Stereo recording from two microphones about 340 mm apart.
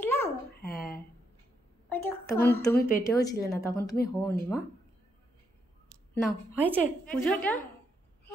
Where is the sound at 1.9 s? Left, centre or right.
Centre.